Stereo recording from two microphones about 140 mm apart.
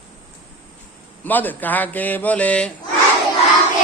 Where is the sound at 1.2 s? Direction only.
10° left (ahead or behind).